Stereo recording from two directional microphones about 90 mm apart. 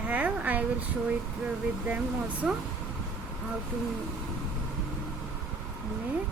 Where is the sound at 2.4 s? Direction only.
Centre (ahead or behind).